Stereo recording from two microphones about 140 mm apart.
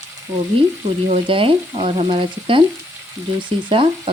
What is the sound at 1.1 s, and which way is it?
A woman's voice, 40° right (ahead or behind).